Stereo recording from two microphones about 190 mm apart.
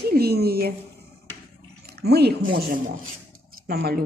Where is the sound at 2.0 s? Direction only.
55° right (ahead or behind).